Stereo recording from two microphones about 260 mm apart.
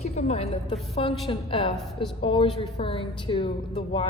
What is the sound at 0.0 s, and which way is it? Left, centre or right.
A woman's voice, left.